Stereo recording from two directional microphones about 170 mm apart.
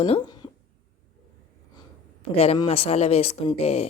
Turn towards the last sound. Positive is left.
turn(degrees=35)  # may be behind; listen again after turning